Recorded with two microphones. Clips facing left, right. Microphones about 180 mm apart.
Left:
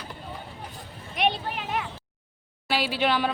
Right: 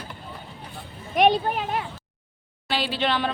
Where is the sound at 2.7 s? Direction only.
10° left (ahead or behind).